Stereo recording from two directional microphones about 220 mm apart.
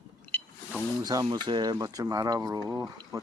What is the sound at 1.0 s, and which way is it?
Speech, 15° right (ahead or behind).